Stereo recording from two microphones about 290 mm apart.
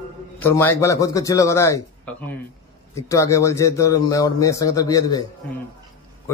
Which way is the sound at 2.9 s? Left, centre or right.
Centre.